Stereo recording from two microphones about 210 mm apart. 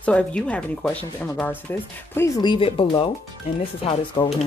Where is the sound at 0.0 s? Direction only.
5° left (ahead or behind).